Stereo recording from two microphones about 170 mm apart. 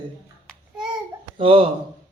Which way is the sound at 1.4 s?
35° right (ahead or behind).